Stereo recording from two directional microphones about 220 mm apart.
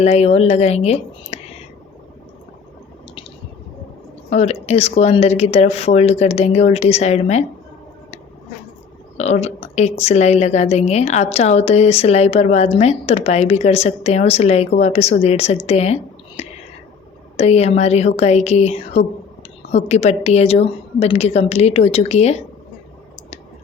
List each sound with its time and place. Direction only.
0.0 s a woman's voice: 30° left (ahead or behind)
4.3 s a woman's voice: 30° left (ahead or behind)
9.1 s a woman's voice: 30° left (ahead or behind)
16.4 s whispering: 30° left (ahead or behind)
17.3 s a woman's voice: 30° left (ahead or behind)